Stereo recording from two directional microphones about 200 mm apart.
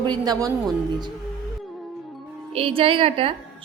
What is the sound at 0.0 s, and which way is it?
Speech, 20° right (ahead or behind).